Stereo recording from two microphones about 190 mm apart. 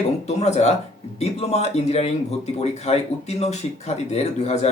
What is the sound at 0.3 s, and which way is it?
A man's voice, 35° left (ahead or behind).